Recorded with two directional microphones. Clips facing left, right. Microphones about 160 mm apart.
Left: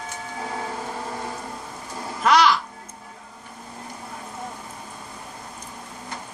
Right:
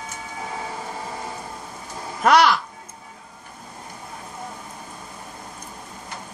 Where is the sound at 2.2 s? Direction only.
55° right (ahead or behind).